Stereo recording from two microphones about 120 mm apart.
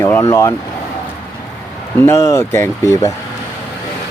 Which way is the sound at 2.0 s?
20° left (ahead or behind).